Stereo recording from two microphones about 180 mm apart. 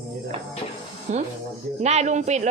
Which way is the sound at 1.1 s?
40° right (ahead or behind).